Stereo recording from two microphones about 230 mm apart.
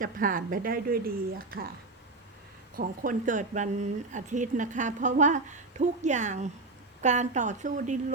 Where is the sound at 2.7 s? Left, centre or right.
Right.